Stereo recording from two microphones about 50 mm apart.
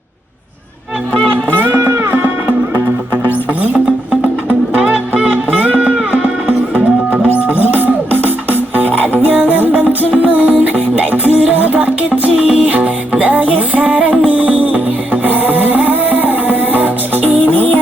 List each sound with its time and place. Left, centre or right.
1.5 s run: right
1.8 s music: right
2.0 s music: right
3.6 s music: right